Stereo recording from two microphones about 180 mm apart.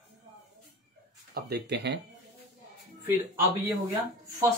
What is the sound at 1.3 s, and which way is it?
Speech, 65° right (ahead or behind).